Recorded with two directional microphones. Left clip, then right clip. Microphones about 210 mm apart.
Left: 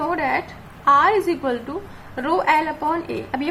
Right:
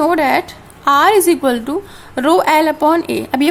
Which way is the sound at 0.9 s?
45° right (ahead or behind).